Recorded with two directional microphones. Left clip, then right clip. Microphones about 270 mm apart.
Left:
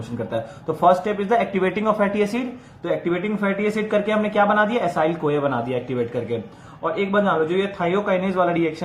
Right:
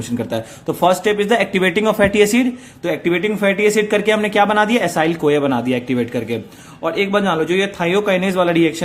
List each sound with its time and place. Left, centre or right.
0.8 s speech: right